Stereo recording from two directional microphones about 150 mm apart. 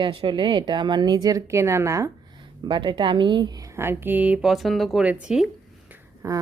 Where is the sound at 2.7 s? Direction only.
30° right (ahead or behind); by 5.5 s 5° right (ahead or behind).